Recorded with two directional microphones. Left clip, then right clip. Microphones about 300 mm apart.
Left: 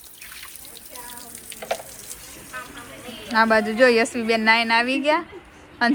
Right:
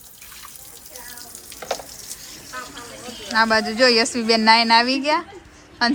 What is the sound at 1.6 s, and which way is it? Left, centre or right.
Water tap, right.